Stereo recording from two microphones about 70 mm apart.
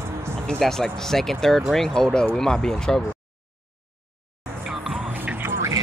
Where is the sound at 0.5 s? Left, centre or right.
Centre.